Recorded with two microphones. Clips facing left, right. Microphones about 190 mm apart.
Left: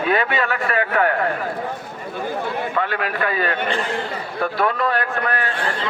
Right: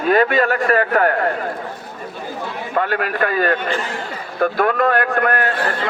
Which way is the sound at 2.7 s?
45° right (ahead or behind).